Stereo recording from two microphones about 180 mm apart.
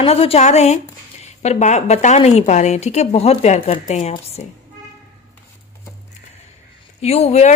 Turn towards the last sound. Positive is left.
turn(degrees=35)  # may be behind; listen again after turning